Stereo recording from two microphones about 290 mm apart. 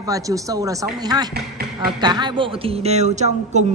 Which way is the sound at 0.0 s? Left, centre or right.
Centre.